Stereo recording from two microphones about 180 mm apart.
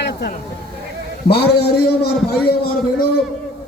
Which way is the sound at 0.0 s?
65° left (ahead or behind).